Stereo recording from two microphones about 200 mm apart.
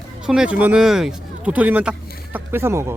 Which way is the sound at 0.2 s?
5° right (ahead or behind).